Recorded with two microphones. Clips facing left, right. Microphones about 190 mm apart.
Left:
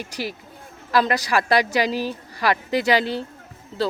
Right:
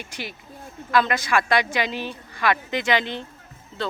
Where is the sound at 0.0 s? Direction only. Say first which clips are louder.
Left 6 dB; 40° left (ahead or behind).